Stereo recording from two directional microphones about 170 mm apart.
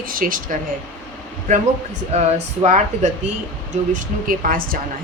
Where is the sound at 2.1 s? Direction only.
40° right (ahead or behind); by 4.7 s 55° right (ahead or behind).